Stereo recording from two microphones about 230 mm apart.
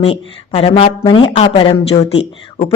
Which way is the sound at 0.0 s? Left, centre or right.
Left.